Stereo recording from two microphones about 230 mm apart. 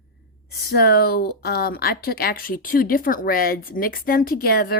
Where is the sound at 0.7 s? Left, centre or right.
Left.